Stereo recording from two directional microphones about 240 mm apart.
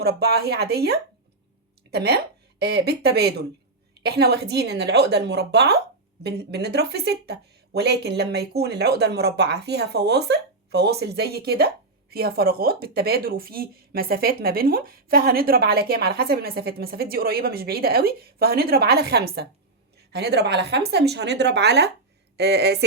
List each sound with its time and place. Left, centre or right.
0.0 s speech: right